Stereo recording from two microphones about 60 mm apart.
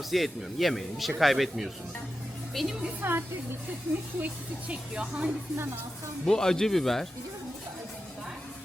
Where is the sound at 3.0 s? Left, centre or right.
Right.